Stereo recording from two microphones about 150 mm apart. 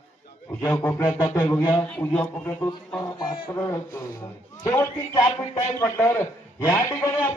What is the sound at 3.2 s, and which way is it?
Speech, 35° left (ahead or behind).